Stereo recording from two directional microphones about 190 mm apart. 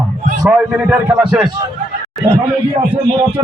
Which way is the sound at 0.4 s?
15° right (ahead or behind).